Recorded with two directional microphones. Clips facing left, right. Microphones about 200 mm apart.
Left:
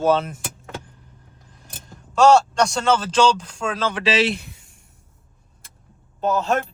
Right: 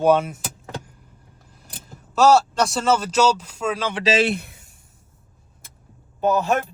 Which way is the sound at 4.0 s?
55° right (ahead or behind).